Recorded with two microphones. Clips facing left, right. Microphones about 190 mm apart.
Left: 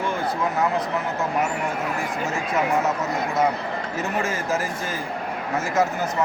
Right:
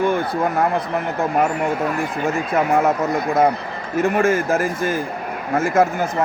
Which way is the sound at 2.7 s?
55° right (ahead or behind).